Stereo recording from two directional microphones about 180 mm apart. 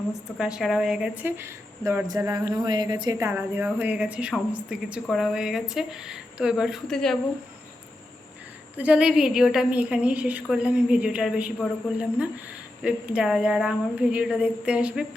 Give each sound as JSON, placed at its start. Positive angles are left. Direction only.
{"t": 0.3, "sound": "a woman's voice", "side_deg": -5}
{"t": 8.8, "sound": "a woman's voice", "side_deg": -5}